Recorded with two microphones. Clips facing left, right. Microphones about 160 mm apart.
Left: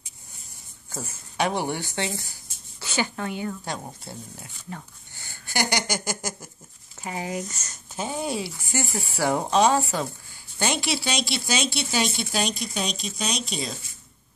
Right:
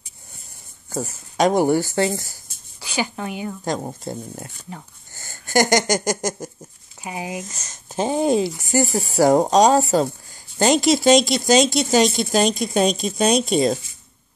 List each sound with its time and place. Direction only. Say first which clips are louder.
0.9 s speech: right 6 dB; 40° right (ahead or behind)
2.8 s speech: right 2 dB; 15° right (ahead or behind)
4.0 s speech: right 10 dB; 45° right (ahead or behind)
5.1 s a sound: right 11 dB; 45° right (ahead or behind)
7.0 s speech: right 1 dB; 15° right (ahead or behind)
8.1 s speech: right 11 dB; 45° right (ahead or behind)